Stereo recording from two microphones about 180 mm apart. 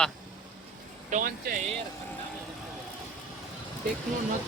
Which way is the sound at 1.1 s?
50° right (ahead or behind).